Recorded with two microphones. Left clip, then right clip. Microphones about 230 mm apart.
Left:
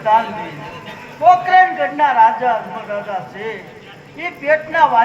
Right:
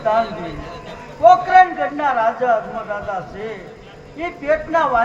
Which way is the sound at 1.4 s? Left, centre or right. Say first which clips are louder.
Left 1 dB; right.